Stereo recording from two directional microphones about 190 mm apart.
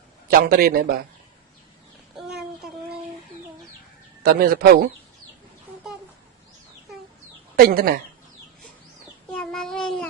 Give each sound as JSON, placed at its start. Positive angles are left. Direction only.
{"t": 0.3, "sound": "a man's voice", "side_deg": -50}
{"t": 4.2, "sound": "a man's voice", "side_deg": -50}
{"t": 7.5, "sound": "a man's voice", "side_deg": -50}
{"t": 9.3, "sound": "child singing", "side_deg": 5}